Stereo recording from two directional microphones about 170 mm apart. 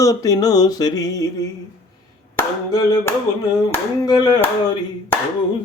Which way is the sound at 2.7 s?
20° left (ahead or behind).